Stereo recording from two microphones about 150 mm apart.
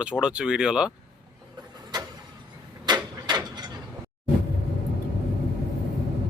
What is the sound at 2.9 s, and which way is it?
Mechanisms, 30° right (ahead or behind).